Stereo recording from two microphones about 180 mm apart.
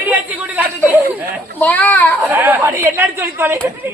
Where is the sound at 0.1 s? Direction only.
10° right (ahead or behind).